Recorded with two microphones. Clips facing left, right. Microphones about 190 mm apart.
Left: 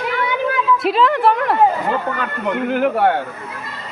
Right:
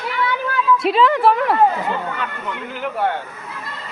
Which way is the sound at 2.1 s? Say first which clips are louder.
Left 6 dB; 55° left (ahead or behind).